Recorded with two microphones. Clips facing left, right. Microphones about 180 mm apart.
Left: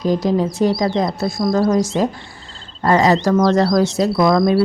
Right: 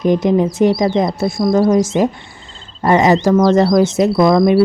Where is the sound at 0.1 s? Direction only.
20° right (ahead or behind).